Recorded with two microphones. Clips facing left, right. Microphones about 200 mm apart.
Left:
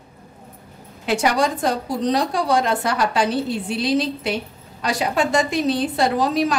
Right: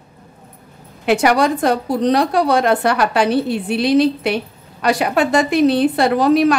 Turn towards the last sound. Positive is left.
turn(degrees=-60)  # may be behind; listen again after turning